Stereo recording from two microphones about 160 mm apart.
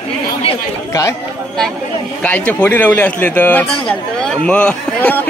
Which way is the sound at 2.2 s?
10° left (ahead or behind).